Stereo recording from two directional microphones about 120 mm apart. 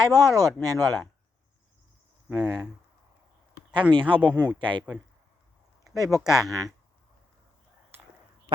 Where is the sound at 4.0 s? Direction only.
45° right (ahead or behind).